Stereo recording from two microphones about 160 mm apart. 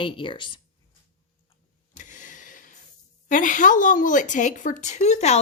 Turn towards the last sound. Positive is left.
turn(degrees=45)  # may be behind; listen again after turning